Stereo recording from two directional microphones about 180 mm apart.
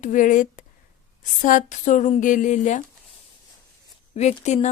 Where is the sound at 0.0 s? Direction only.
45° left (ahead or behind).